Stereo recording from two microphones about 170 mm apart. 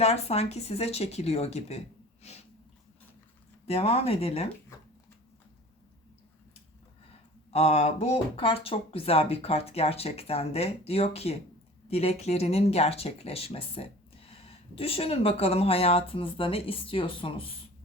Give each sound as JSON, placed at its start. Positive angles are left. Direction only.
{"t": 0.0, "sound": "speech", "side_deg": 40}
{"t": 3.7, "sound": "speech", "side_deg": 35}
{"t": 7.5, "sound": "speech", "side_deg": 40}